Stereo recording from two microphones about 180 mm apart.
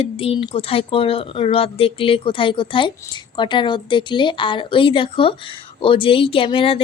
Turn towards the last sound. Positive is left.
turn(degrees=30)  # may be behind; listen again after turning